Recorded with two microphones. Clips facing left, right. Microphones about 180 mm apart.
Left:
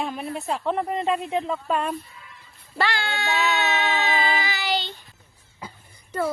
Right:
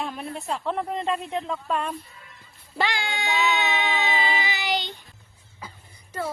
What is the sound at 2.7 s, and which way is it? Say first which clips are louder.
Speech: left 1 dB; 15° right (ahead or behind).